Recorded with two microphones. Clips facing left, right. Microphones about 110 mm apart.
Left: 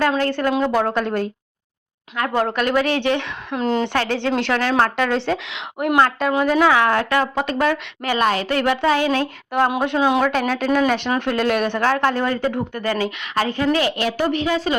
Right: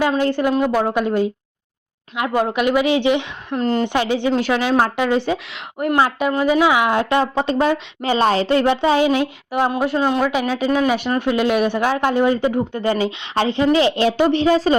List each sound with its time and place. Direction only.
0.0 s a man's voice: 10° right (ahead or behind)
3.5 s speech: centre (ahead or behind)
3.8 s a man's voice: 15° right (ahead or behind)
10.0 s speech: 10° left (ahead or behind)
10.2 s a man's voice: 5° right (ahead or behind); by 14.8 s 35° right (ahead or behind)